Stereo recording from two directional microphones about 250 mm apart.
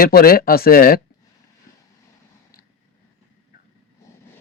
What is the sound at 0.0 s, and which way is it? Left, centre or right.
Speech, left.